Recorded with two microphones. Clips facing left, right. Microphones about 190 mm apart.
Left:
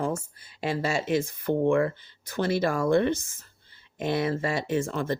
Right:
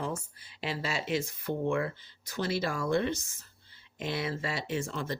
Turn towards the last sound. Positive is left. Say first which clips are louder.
# left 7 dB
turn(degrees=55)  # may be behind; listen again after turning